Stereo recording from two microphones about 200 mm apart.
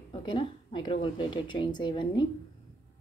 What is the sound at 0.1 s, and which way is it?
Speech, 25° left (ahead or behind).